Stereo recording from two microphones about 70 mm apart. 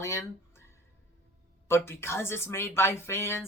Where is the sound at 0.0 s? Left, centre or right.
Left.